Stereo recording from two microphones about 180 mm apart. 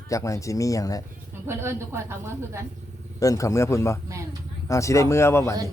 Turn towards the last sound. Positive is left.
turn(degrees=15)  # may be behind; listen again after turning